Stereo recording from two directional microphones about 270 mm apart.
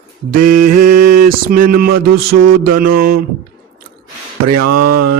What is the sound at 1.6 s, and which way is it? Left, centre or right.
Mantra, right.